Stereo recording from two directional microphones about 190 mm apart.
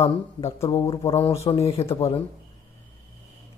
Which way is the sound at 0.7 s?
20° left (ahead or behind).